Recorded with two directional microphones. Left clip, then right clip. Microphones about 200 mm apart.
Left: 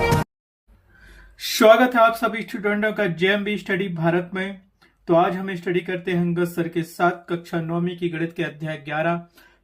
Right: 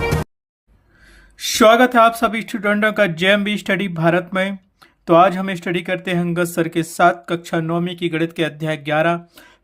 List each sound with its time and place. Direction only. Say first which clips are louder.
1.4 s speech: right 2 dB; 35° right (ahead or behind)